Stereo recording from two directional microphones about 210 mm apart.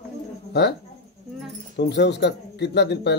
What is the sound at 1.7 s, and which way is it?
A man's voice, 55° left (ahead or behind).